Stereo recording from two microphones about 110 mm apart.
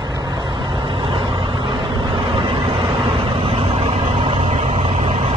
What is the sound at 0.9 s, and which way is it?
Vehicle, 50° right (ahead or behind).